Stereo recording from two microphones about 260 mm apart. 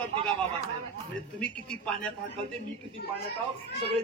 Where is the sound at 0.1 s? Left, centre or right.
Right.